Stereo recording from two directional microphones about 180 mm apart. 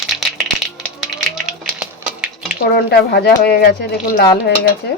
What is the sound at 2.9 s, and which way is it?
Speech, 60° left (ahead or behind).